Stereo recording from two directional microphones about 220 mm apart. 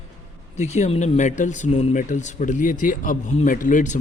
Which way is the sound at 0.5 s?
30° left (ahead or behind).